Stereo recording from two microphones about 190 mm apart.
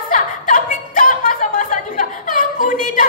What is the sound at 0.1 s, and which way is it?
Chuckle, 45° left (ahead or behind).